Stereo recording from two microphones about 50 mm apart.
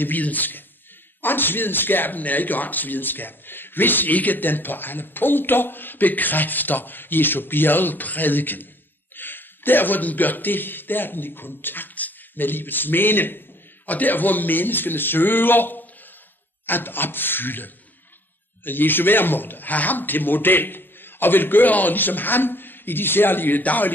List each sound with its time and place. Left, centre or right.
0.0 s a man's voice: left